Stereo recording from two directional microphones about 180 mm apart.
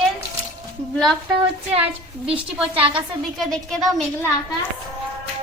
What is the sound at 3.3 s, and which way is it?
Speech, centre (ahead or behind).